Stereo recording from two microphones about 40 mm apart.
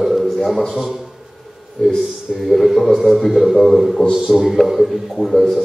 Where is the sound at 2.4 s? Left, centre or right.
Centre.